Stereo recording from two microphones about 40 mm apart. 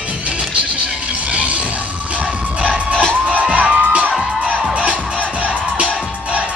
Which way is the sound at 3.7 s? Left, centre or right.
Right.